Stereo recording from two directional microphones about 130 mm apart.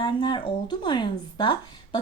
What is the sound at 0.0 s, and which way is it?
Speech, 35° left (ahead or behind).